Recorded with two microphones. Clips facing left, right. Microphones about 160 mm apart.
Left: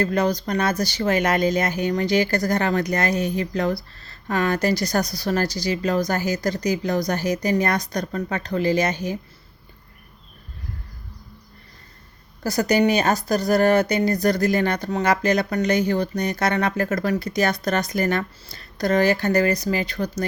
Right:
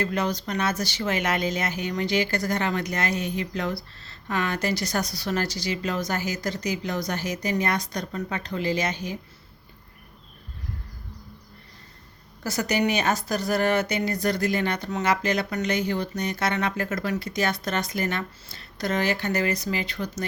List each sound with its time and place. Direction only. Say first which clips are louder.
0.0 s speech: left 5 dB; 40° left (ahead or behind)
12.4 s speech: left 6 dB; 35° left (ahead or behind)